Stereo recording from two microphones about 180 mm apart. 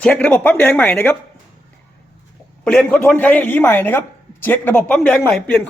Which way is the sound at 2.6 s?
5° left (ahead or behind).